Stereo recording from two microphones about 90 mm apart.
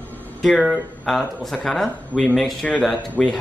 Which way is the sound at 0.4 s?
Centre (ahead or behind).